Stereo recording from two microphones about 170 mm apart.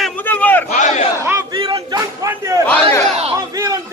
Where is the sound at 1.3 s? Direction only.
20° right (ahead or behind).